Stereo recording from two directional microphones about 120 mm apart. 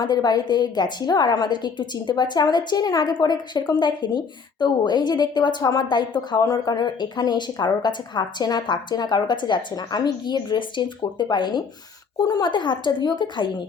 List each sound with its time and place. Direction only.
0.0 s a woman's voice: 35° left (ahead or behind)